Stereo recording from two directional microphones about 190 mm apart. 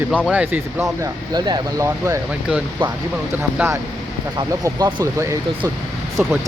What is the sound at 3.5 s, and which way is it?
Speech, 10° right (ahead or behind).